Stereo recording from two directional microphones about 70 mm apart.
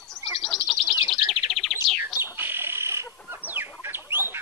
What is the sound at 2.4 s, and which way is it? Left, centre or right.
Fire alarm, right.